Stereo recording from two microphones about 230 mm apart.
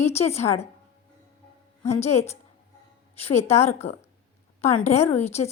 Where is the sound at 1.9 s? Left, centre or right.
Left.